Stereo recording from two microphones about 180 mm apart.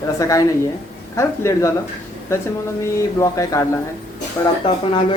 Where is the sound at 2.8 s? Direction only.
15° left (ahead or behind).